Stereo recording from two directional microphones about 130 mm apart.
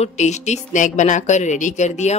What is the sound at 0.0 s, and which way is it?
Speech, 60° left (ahead or behind).